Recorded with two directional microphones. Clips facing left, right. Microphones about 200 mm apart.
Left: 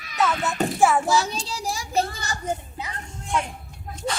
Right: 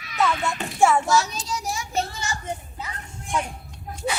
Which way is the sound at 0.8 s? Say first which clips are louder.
Right 1 dB; 5° left (ahead or behind).